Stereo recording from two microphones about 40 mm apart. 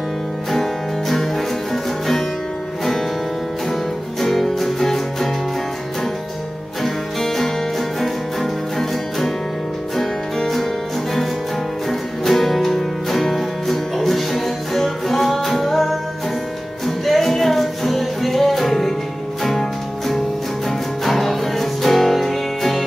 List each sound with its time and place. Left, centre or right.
0.5 s music: centre
4.2 s music: centre
6.8 s music: centre
11.9 s music: centre